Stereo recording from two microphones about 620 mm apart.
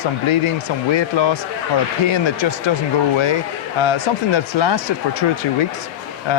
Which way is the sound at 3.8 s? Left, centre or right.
Left.